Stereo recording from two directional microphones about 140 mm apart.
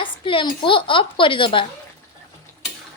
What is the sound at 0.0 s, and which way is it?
A woman's voice, 35° left (ahead or behind).